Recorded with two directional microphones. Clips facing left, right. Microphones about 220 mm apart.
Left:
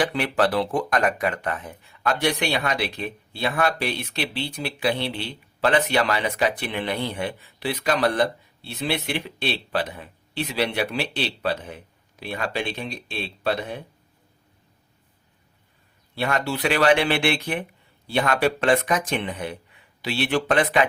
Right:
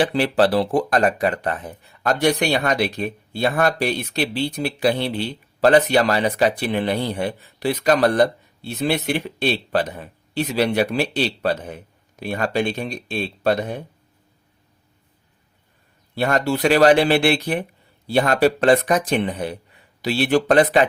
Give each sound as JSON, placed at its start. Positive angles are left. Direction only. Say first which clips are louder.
{"t": 0.0, "sound": "speech", "louder": "right 4 dB", "side_deg": -30}
{"t": 16.1, "sound": "speech", "louder": "right 5 dB", "side_deg": -40}